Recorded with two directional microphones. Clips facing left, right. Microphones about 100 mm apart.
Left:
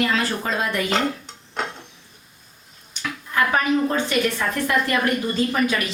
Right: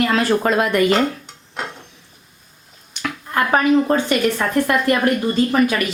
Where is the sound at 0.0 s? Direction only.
60° right (ahead or behind).